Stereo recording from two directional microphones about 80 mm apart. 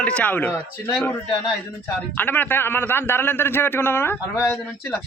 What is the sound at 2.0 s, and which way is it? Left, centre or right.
Speech, left.